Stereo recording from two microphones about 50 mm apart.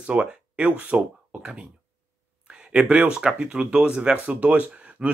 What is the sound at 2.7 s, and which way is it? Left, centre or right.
Speech, centre.